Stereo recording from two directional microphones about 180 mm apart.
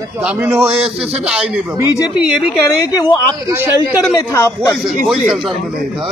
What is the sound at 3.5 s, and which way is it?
Speech, 10° right (ahead or behind).